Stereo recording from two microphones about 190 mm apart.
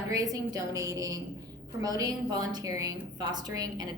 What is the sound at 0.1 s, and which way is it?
A woman's voice, 20° right (ahead or behind).